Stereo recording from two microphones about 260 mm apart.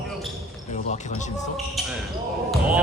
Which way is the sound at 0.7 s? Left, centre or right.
Left.